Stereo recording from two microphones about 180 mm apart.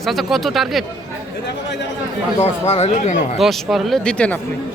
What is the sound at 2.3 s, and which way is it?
Speech, 35° left (ahead or behind).